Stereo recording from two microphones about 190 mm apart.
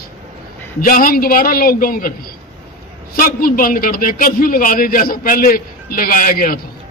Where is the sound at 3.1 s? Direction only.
50° left (ahead or behind).